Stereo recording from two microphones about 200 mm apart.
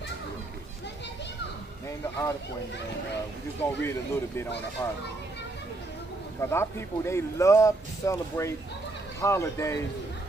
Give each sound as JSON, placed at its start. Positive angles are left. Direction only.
{"t": 1.9, "sound": "speech", "side_deg": 15}
{"t": 3.6, "sound": "speech", "side_deg": 15}
{"t": 6.4, "sound": "speech", "side_deg": 15}